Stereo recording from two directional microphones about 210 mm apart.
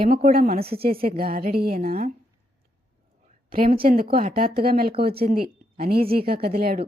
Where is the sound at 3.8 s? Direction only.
45° right (ahead or behind).